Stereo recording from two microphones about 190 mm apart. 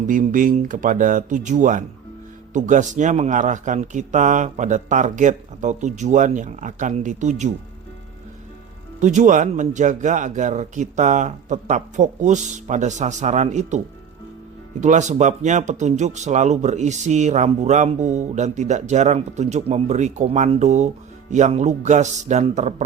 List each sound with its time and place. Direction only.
0.1 s speech: 45° right (ahead or behind)
9.0 s speech: 40° right (ahead or behind)